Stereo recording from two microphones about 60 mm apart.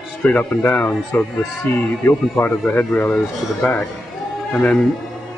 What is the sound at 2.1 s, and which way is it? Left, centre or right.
Speech, left.